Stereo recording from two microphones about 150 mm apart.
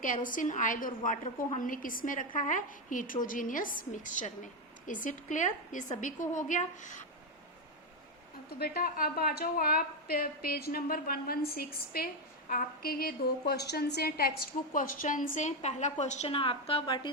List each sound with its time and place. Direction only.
0.0 s a woman's voice: 65° left (ahead or behind)
8.5 s a woman's voice: 90° left; by 17.1 s 35° left (ahead or behind)